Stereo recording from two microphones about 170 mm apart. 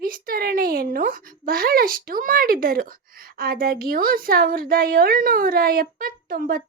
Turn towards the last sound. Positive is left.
turn(degrees=-60)  # may be behind; listen again after turning